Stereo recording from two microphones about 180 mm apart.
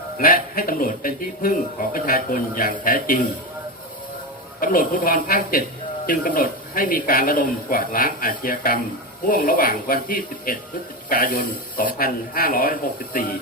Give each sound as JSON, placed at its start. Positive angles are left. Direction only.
{"t": 0.2, "sound": "speech", "side_deg": 55}
{"t": 4.6, "sound": "speech", "side_deg": 55}